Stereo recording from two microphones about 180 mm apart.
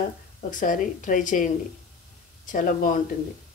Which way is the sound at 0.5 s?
45° left (ahead or behind).